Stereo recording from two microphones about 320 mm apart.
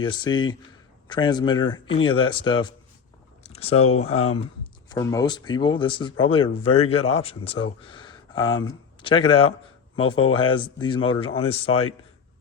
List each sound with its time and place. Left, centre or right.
0.0 s speech: centre
3.4 s a sound: centre
3.9 s speech: centre